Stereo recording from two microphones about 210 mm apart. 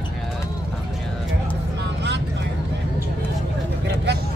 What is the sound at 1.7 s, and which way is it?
Vehicle, 55° right (ahead or behind).